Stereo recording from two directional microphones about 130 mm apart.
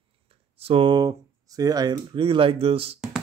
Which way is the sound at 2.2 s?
45° right (ahead or behind).